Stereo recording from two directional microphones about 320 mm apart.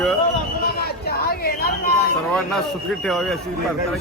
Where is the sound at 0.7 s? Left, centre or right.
Left.